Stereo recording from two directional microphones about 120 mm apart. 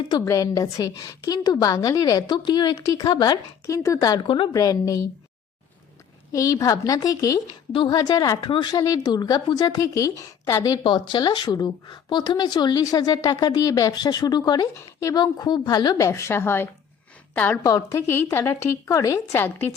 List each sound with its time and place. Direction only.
0.3 s a woman's voice: 25° left (ahead or behind)
4.2 s a woman's voice: 45° left (ahead or behind)
4.5 s a woman's voice: 30° left (ahead or behind)
6.3 s a woman's voice: 30° left (ahead or behind)
10.8 s a woman's voice: 40° left (ahead or behind)
16.0 s a woman's voice: 25° left (ahead or behind)
17.6 s a woman's voice: 30° left (ahead or behind)